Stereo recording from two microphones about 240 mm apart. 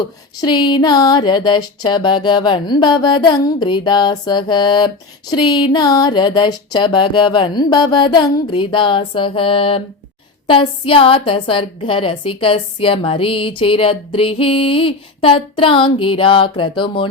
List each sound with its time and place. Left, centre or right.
0.0 s a woman's voice: centre
5.3 s child singing: centre
5.7 s a woman's voice: centre